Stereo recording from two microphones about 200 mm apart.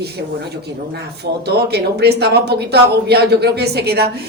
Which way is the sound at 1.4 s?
55° right (ahead or behind).